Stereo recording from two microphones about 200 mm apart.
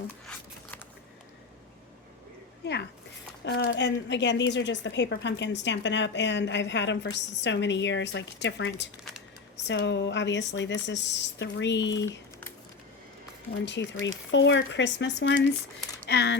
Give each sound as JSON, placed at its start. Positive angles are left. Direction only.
{"t": 3.4, "sound": "a woman's voice", "side_deg": 60}
{"t": 13.7, "sound": "a woman's voice", "side_deg": 65}